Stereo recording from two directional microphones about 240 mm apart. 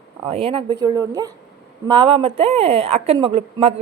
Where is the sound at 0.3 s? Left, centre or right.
Right.